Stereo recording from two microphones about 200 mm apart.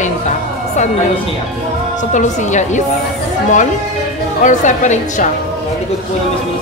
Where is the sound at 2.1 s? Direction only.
40° left (ahead or behind).